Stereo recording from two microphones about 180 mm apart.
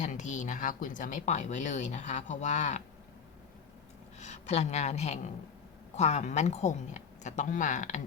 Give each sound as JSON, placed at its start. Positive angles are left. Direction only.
{"t": 0.0, "sound": "speech", "side_deg": 40}
{"t": 4.2, "sound": "a woman's voice", "side_deg": 40}